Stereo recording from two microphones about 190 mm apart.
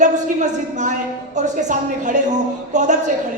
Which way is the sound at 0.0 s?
40° right (ahead or behind).